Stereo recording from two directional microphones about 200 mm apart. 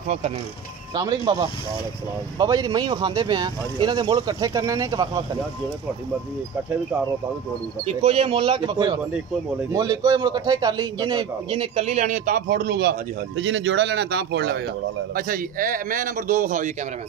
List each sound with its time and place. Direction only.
0.9 s a man's voice: 20° right (ahead or behind)
7.8 s a man's voice: 30° right (ahead or behind); by 12.9 s 55° right (ahead or behind)
13.4 s a man's voice: 65° right (ahead or behind)
15.1 s a man's voice: 45° right (ahead or behind)